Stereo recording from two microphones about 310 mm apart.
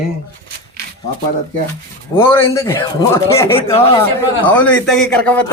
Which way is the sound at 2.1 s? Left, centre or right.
Centre.